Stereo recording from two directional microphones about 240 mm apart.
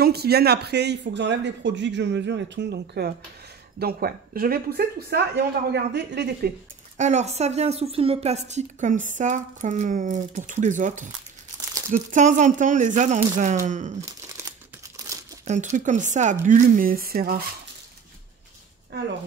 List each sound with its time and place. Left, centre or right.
0.0 s speech: right
7.0 s speech: right
14.0 s crumpling: centre
15.4 s speech: right